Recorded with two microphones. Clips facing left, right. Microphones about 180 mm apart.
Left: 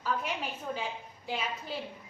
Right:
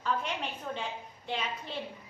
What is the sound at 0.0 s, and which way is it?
A woman's voice, 5° left (ahead or behind).